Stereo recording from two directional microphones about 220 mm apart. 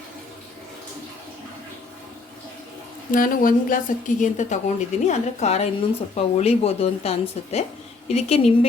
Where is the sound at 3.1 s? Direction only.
40° left (ahead or behind).